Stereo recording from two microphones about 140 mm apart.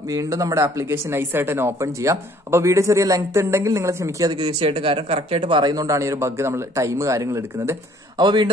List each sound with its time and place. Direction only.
0.1 s speech: 25° right (ahead or behind)
8.2 s a man's voice: 30° right (ahead or behind)